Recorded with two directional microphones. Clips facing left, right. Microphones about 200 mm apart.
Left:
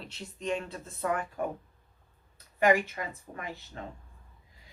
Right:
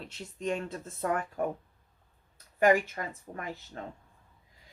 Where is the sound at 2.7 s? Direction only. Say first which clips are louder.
Right 1 dB; 45° right (ahead or behind).